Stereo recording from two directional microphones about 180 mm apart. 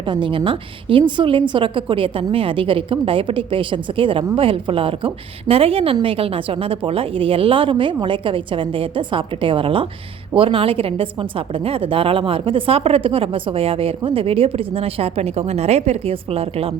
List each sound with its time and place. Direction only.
0.0 s a woman's voice: 25° right (ahead or behind)